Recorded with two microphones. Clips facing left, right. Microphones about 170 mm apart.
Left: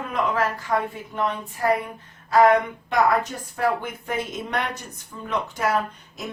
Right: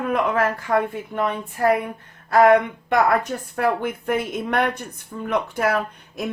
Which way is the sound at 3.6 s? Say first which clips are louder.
Right 2 dB; 55° right (ahead or behind).